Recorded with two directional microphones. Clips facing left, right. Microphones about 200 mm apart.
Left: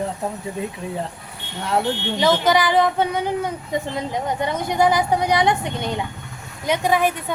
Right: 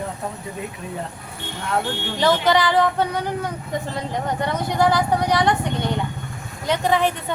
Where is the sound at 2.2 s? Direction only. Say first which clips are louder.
Even; 10° left (ahead or behind).